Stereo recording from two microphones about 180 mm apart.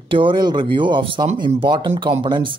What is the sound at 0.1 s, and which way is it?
Speech, 25° right (ahead or behind).